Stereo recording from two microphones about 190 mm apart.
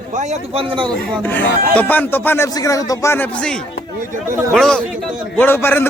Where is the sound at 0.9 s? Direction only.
10° left (ahead or behind).